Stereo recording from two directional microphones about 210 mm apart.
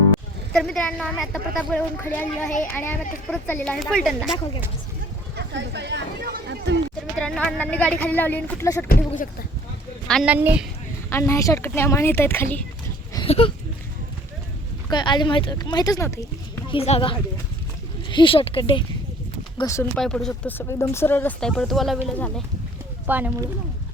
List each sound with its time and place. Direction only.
0.5 s speech: centre (ahead or behind)
5.4 s a sound: 55° right (ahead or behind)
7.2 s speech: 5° left (ahead or behind)
10.1 s a woman's voice: 5° right (ahead or behind)
11.1 s speech: 15° left (ahead or behind)
13.1 s a sound: 25° left (ahead or behind)
14.8 s speech: 20° left (ahead or behind)
16.6 s speech: 30° left (ahead or behind)
19.5 s speech: 15° left (ahead or behind)
20.0 s speech: 5° left (ahead or behind)
23.0 s a woman's voice: 10° right (ahead or behind)